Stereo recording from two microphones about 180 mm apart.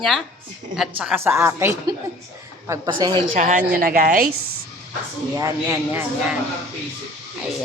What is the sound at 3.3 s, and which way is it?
Speech, 45° right (ahead or behind).